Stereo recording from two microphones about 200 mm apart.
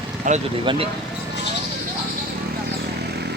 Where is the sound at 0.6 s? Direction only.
25° right (ahead or behind).